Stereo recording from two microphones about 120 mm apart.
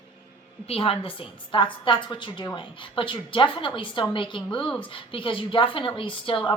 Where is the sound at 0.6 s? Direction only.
55° left (ahead or behind).